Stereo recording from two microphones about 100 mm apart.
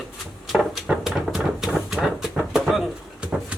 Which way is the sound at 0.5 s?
5° right (ahead or behind).